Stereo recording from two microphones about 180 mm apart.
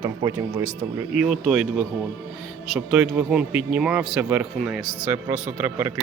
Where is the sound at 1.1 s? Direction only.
5° right (ahead or behind).